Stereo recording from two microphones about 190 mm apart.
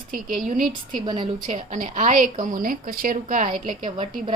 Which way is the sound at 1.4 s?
40° right (ahead or behind).